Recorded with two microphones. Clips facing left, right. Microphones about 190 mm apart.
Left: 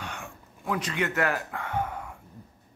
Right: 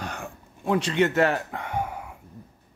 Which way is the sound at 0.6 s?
30° right (ahead or behind).